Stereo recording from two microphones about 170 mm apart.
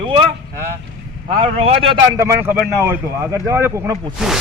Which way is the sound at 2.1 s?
15° right (ahead or behind).